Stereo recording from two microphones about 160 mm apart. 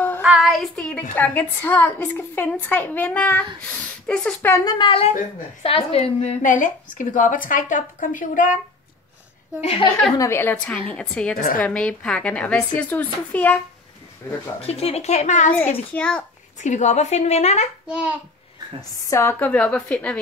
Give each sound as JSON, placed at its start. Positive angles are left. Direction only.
{"t": 0.2, "sound": "child singing", "side_deg": -5}
{"t": 1.1, "sound": "a woman's voice", "side_deg": 10}
{"t": 4.6, "sound": "a woman's voice", "side_deg": 30}
{"t": 6.6, "sound": "speech", "side_deg": 55}
{"t": 9.6, "sound": "a woman's voice", "side_deg": 40}
{"t": 10.1, "sound": "a woman's voice", "side_deg": 15}
{"t": 14.6, "sound": "a woman's voice", "side_deg": 40}
{"t": 15.9, "sound": "a woman's voice", "side_deg": 10}
{"t": 16.6, "sound": "a woman's voice", "side_deg": 45}
{"t": 17.8, "sound": "a child's voice", "side_deg": -5}
{"t": 19.0, "sound": "a woman's voice", "side_deg": 15}